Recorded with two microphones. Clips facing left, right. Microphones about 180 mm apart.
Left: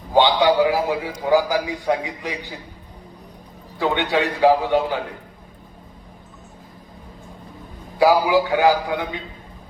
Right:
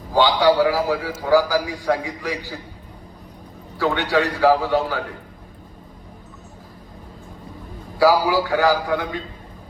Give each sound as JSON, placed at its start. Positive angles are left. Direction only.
{"t": 0.1, "sound": "a man's voice", "side_deg": 20}
{"t": 3.8, "sound": "a man's voice", "side_deg": 20}
{"t": 7.9, "sound": "a man's voice", "side_deg": 20}